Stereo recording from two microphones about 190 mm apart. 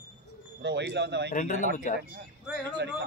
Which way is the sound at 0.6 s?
65° right (ahead or behind).